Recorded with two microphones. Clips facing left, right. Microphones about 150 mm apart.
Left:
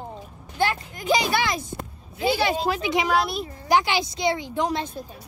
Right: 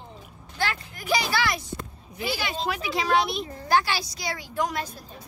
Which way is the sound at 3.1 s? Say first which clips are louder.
Even; centre (ahead or behind).